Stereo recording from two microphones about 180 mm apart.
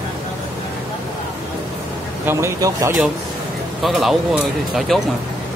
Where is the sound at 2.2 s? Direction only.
15° right (ahead or behind).